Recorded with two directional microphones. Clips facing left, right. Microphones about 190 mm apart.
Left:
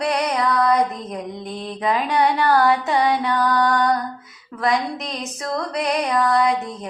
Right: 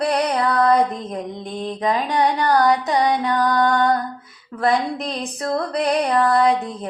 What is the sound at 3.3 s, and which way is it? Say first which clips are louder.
Mantra: right 1 dB; 20° right (ahead or behind).